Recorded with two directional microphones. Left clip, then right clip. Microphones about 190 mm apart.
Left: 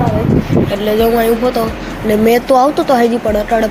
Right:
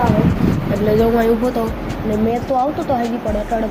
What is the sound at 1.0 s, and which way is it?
Speech, centre (ahead or behind).